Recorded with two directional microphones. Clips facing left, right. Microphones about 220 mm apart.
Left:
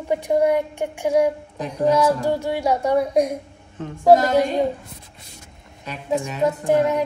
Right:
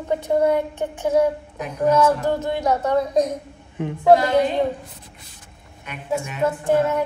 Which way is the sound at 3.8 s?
15° right (ahead or behind).